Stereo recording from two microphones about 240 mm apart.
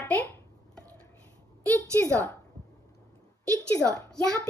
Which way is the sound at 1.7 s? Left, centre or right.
Centre.